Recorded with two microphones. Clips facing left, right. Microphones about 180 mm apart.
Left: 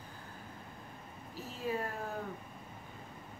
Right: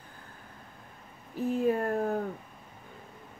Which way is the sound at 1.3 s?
55° right (ahead or behind).